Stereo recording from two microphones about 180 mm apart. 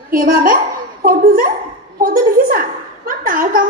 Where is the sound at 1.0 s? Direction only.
55° right (ahead or behind).